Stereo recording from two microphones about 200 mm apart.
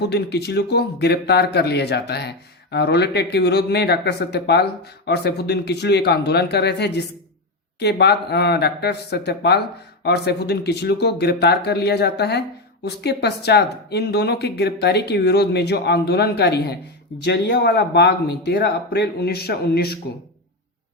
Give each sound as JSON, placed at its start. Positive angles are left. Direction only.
{"t": 0.0, "sound": "speech", "side_deg": 55}